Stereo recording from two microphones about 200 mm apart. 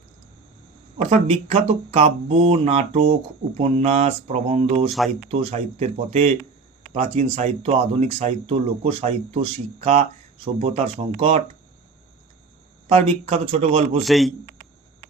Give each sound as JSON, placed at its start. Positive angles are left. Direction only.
{"t": 1.1, "sound": "speech", "side_deg": -30}
{"t": 12.9, "sound": "speech", "side_deg": -30}
{"t": 14.0, "sound": "a man's voice", "side_deg": 0}